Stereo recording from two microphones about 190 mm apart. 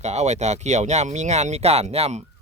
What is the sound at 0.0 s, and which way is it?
Speech, 35° right (ahead or behind).